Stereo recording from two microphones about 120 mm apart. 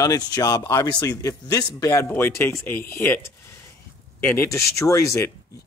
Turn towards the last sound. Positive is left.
turn(degrees=25)  # may be behind; listen again after turning